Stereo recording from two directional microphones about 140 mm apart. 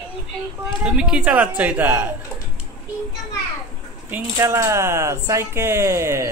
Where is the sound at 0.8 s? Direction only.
5° right (ahead or behind).